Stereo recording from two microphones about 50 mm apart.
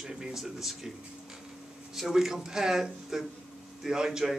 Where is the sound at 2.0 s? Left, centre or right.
Centre.